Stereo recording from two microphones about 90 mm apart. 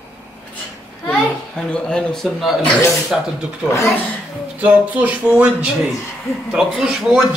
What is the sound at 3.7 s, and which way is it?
Speech, 30° left (ahead or behind).